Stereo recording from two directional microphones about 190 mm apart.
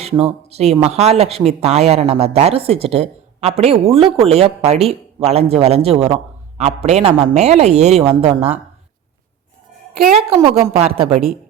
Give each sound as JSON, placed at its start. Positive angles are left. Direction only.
{"t": 0.0, "sound": "speech", "side_deg": -30}
{"t": 10.4, "sound": "speech", "side_deg": -30}